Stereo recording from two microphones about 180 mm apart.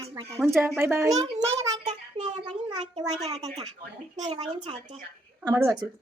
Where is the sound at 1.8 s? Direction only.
40° right (ahead or behind).